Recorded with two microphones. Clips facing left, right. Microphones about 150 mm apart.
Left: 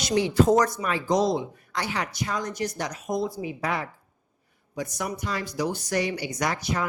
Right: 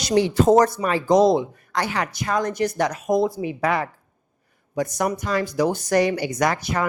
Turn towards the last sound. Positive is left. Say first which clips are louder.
# right 5 dB
turn(degrees=-55)  # may be behind; listen again after turning